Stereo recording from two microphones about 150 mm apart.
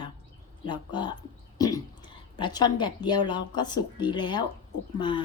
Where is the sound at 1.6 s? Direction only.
25° left (ahead or behind).